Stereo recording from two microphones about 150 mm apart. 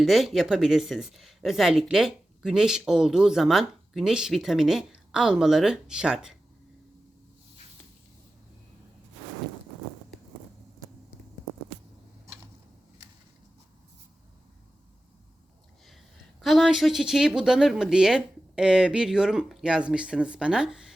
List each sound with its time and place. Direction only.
0.0 s speech: centre (ahead or behind)
16.4 s speech: centre (ahead or behind)